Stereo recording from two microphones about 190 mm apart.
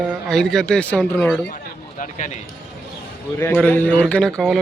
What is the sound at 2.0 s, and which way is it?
Speech, 40° left (ahead or behind).